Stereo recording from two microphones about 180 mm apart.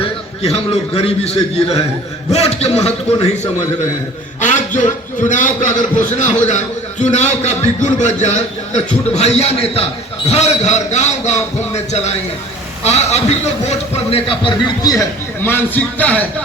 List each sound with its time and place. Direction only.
0.0 s a man's voice: 35° left (ahead or behind)
4.4 s a sound: 45° left (ahead or behind)
5.3 s a man's voice: 45° left (ahead or behind); by 16.2 s 10° left (ahead or behind)